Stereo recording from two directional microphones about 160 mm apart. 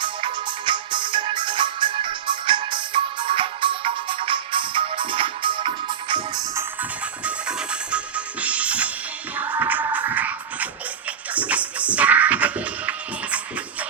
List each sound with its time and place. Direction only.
0.0 s music: 30° right (ahead or behind)
7.3 s music: 5° right (ahead or behind)